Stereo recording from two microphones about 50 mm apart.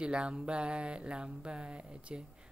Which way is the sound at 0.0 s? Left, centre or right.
Centre.